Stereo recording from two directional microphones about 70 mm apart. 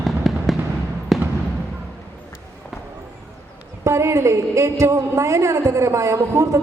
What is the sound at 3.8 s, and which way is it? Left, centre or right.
A woman's voice, right.